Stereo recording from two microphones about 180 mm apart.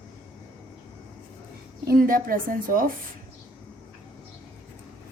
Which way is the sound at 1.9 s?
50° right (ahead or behind).